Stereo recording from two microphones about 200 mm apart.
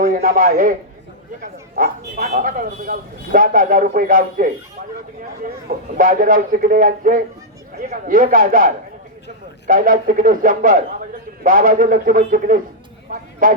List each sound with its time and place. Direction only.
0.0 s a man's voice: 45° right (ahead or behind)
6.0 s speech: 40° right (ahead or behind)